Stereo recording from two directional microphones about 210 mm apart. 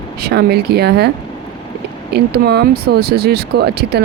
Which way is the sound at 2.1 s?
50° right (ahead or behind).